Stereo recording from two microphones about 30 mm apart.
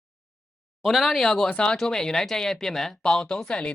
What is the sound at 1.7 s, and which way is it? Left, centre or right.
Speech, centre.